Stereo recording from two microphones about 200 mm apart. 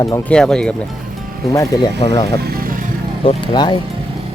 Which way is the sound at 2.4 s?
50° right (ahead or behind).